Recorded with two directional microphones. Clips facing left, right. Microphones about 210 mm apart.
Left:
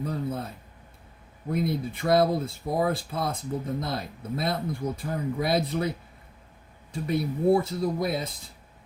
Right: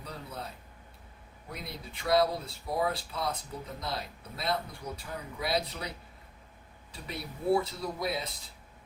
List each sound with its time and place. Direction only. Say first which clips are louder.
0.0 s a sound: left 11 dB; 50° left (ahead or behind)
1.5 s speech: left 15 dB; 50° left (ahead or behind)
6.9 s speech: left 13 dB; 50° left (ahead or behind)